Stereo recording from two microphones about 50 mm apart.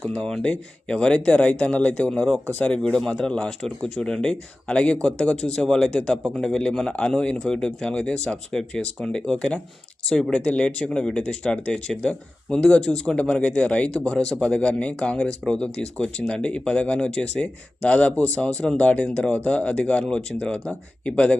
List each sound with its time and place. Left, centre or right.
0.0 s speech: centre
2.0 s speech: centre
13.6 s speech: left
17.8 s speech: left